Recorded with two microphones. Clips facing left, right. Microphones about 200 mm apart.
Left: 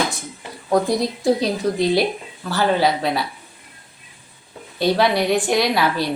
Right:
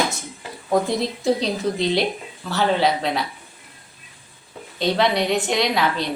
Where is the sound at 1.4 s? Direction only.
Centre (ahead or behind).